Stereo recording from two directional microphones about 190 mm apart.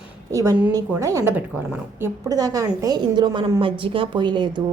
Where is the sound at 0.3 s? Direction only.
15° right (ahead or behind).